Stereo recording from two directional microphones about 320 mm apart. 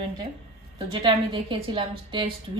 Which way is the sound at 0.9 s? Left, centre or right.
Centre.